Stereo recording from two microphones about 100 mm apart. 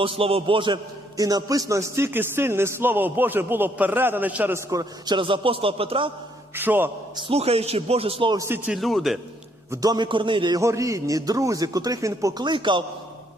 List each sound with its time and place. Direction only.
0.0 s a man's voice: 70° right (ahead or behind)
1.1 s a man's voice: 35° right (ahead or behind); by 4.5 s 15° right (ahead or behind)
4.5 s a man's voice: 35° right (ahead or behind)
5.1 s a man's voice: 60° right (ahead or behind)
6.6 s a man's voice: 20° right (ahead or behind)
7.2 s speech: 80° right
8.4 s a man's voice: 20° right (ahead or behind)
8.7 s a man's voice: centre (ahead or behind)
9.8 s a man's voice: 40° right (ahead or behind)
10.1 s a man's voice: 55° right (ahead or behind)
10.5 s a man's voice: 30° right (ahead or behind)
12.4 s a man's voice: 50° right (ahead or behind)